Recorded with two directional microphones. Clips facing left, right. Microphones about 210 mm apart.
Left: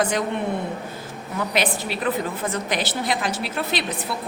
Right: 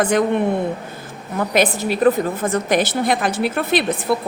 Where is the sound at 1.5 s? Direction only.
45° right (ahead or behind).